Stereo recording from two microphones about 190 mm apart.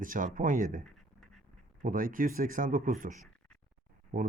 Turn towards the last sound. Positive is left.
turn(degrees=-45)  # may be behind; listen again after turning